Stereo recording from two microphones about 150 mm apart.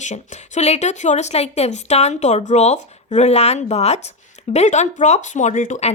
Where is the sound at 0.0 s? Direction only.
50° left (ahead or behind).